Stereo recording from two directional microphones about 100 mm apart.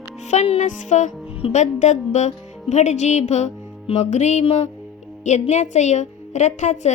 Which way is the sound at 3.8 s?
90° left.